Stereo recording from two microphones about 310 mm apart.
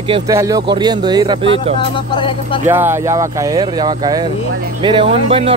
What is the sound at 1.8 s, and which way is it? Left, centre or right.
Speech, centre.